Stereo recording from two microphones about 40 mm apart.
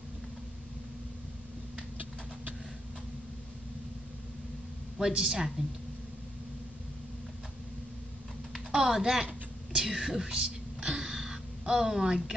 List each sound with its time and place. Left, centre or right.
5.1 s speech: centre
8.7 s speech: centre
9.8 s whispering: centre